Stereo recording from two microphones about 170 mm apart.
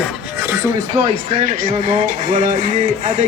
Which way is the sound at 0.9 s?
40° right (ahead or behind).